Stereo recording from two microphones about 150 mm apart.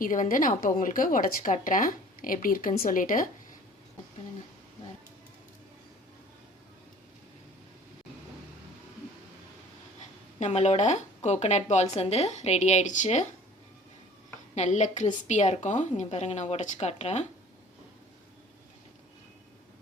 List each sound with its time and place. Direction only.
0.0 s a woman's voice: 65° left (ahead or behind)
10.4 s speech: 50° left (ahead or behind)
14.5 s speech: 50° left (ahead or behind)